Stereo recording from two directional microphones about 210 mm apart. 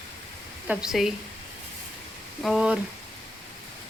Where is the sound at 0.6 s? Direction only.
5° right (ahead or behind).